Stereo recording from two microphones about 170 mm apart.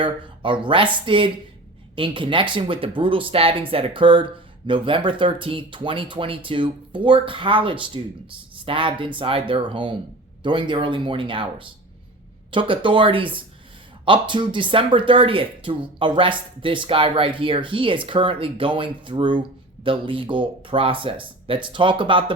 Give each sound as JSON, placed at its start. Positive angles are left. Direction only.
{"t": 0.0, "sound": "speech", "side_deg": -30}